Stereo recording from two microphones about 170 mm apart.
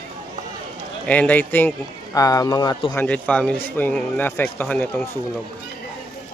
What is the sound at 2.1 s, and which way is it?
Speech, 20° left (ahead or behind).